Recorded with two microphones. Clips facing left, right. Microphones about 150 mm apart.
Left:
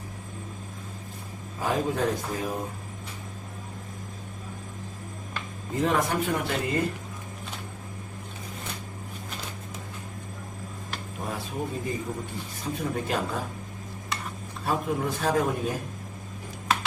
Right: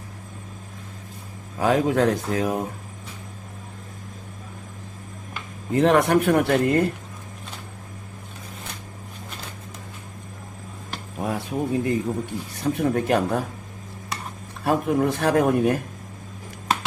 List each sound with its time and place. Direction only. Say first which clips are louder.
1.5 s a man's voice: right 7 dB; 75° right (ahead or behind)
5.7 s a man's voice: right 8 dB; 75° right (ahead or behind)
11.2 s a man's voice: right 7 dB; 65° right (ahead or behind)
14.6 s speech: right 7 dB; 60° right (ahead or behind)